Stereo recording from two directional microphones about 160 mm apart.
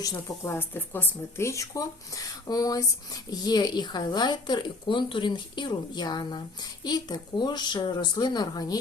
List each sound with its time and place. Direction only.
0.0 s speech: 20° left (ahead or behind)